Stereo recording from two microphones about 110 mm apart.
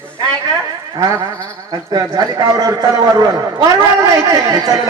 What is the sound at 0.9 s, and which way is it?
A man's voice, 30° right (ahead or behind).